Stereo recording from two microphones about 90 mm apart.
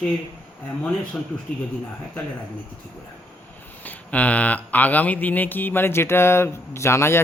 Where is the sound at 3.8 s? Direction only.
15° left (ahead or behind).